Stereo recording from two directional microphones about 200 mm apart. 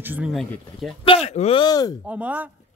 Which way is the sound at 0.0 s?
5° right (ahead or behind).